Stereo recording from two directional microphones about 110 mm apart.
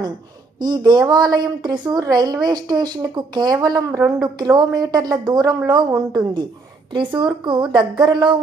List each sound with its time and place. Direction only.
0.6 s a woman's voice: 40° right (ahead or behind)